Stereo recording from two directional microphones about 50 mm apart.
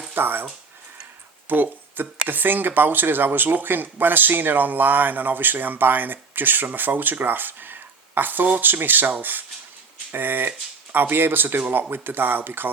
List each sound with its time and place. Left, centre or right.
0.1 s speech: right
1.5 s speech: right